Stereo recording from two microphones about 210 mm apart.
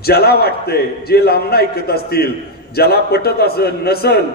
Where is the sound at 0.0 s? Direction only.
50° left (ahead or behind).